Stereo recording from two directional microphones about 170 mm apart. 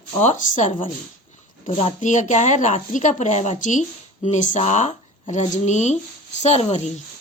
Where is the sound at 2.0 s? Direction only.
45° left (ahead or behind).